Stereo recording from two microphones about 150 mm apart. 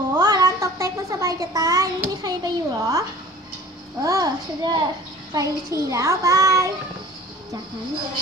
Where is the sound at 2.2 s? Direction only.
25° right (ahead or behind).